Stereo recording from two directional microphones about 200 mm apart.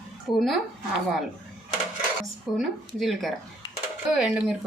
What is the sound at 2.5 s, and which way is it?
A woman's voice, centre (ahead or behind).